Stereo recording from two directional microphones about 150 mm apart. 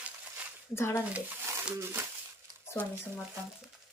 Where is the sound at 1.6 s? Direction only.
15° right (ahead or behind).